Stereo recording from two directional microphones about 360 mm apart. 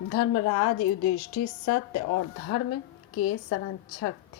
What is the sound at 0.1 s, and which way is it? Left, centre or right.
A woman's voice, left.